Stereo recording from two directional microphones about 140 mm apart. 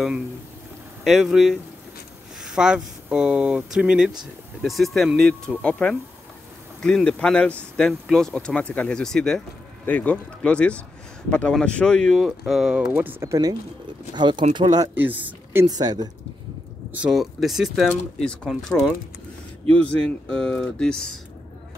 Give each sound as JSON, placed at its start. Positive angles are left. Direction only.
{"t": 1.0, "sound": "a man's voice", "side_deg": 0}
{"t": 13.2, "sound": "speech", "side_deg": -25}
{"t": 15.0, "sound": "speech", "side_deg": -15}
{"t": 15.7, "sound": "speech", "side_deg": -30}
{"t": 16.9, "sound": "a man's voice", "side_deg": -5}